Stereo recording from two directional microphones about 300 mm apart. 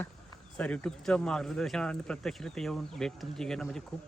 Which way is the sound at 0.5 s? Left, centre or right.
Centre.